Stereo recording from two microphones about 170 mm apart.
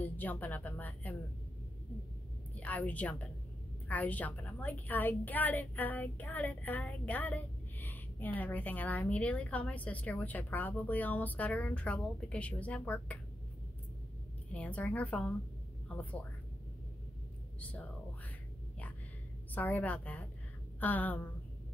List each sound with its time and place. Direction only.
0.0 s a woman's voice: 10° left (ahead or behind)
2.5 s a woman's voice: 10° left (ahead or behind)
14.5 s a woman's voice: 10° left (ahead or behind)
17.6 s speech: 10° left (ahead or behind)
19.5 s a woman's voice: 10° left (ahead or behind)